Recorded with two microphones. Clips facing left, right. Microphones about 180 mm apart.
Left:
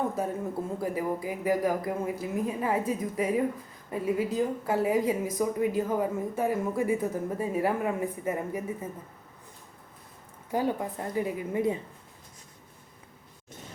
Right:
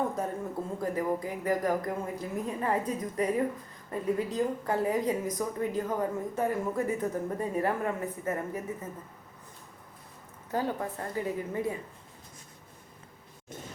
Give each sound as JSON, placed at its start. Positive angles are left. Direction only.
{"t": 0.8, "sound": "a woman's voice", "side_deg": 10}
{"t": 10.5, "sound": "a woman's voice", "side_deg": 15}